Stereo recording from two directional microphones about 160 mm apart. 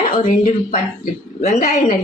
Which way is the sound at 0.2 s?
55° left (ahead or behind).